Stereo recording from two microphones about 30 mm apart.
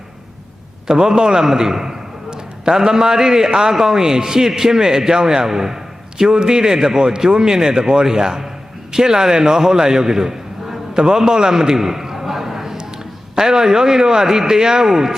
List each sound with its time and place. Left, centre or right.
0.9 s a man's voice: right
11.7 s a sound: centre
13.3 s a man's voice: right